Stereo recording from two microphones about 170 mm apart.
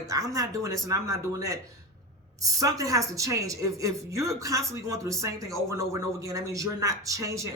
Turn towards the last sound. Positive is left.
turn(degrees=-20)  # may be behind; listen again after turning